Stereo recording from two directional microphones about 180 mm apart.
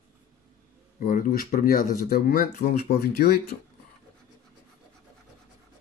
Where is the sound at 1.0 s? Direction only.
50° left (ahead or behind).